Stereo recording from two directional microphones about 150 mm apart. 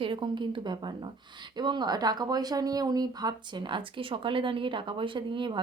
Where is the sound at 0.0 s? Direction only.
35° right (ahead or behind).